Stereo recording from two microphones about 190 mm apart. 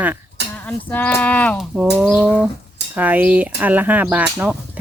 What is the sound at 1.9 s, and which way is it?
Speech, 5° right (ahead or behind).